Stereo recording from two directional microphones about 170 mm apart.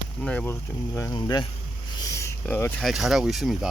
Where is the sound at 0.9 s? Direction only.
20° left (ahead or behind).